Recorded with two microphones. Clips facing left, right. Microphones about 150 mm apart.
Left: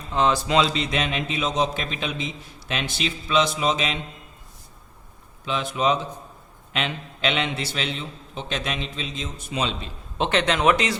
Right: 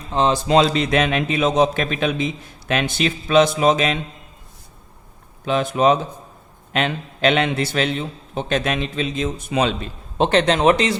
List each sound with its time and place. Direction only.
0.1 s speech: 25° right (ahead or behind)
0.5 s a man's voice: 45° right (ahead or behind)
5.5 s a man's voice: 50° right (ahead or behind)
10.2 s speech: 35° right (ahead or behind)